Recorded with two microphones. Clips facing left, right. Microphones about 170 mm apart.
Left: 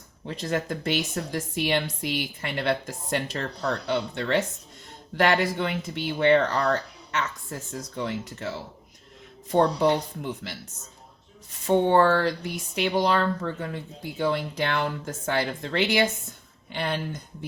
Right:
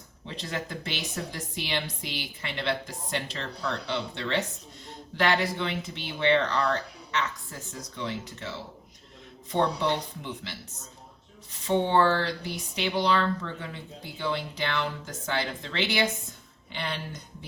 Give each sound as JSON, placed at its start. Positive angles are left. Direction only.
{"t": 0.3, "sound": "speech", "side_deg": 50}
{"t": 9.5, "sound": "speech", "side_deg": 45}
{"t": 11.6, "sound": "speech", "side_deg": 45}